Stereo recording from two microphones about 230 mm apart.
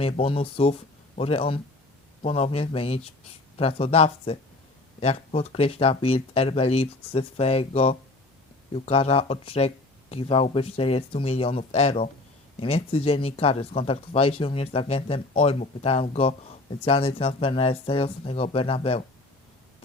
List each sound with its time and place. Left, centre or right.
0.0 s speech: left